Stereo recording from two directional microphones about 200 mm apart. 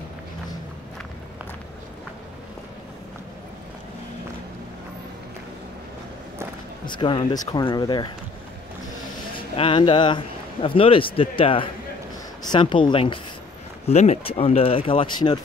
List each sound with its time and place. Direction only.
6.9 s a man's voice: 25° left (ahead or behind)
9.6 s a man's voice: 25° left (ahead or behind)